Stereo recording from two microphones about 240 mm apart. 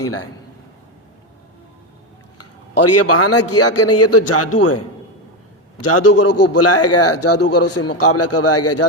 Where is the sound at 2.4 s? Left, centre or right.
Left.